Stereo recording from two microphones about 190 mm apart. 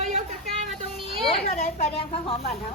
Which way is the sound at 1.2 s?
35° left (ahead or behind).